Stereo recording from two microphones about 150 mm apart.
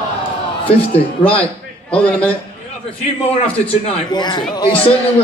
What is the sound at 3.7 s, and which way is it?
A man's voice, 35° left (ahead or behind).